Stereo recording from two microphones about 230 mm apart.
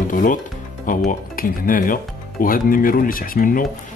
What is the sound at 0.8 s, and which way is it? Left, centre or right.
Speech, left.